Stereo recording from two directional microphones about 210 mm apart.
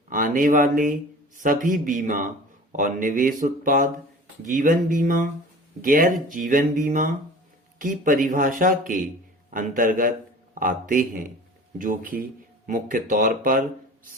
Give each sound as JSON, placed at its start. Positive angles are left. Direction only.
{"t": 0.1, "sound": "speech", "side_deg": -40}